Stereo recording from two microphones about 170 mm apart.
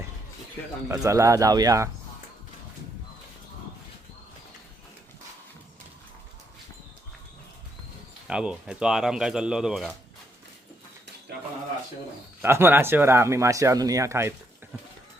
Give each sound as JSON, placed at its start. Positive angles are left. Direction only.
{"t": 0.9, "sound": "speech", "side_deg": -20}
{"t": 8.3, "sound": "speech", "side_deg": -5}
{"t": 12.4, "sound": "speech", "side_deg": -15}